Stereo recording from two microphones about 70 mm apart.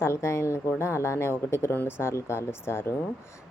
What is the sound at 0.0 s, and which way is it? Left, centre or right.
Speech, left.